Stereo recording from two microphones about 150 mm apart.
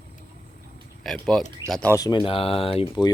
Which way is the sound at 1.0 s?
5° left (ahead or behind).